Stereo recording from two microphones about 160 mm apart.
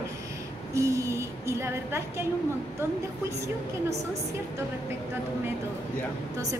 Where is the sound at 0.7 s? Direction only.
20° right (ahead or behind).